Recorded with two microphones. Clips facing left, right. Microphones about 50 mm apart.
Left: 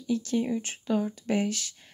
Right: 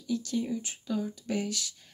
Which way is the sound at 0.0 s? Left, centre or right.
Left.